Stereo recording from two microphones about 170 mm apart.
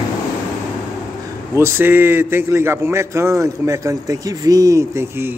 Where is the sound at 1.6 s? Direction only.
15° right (ahead or behind).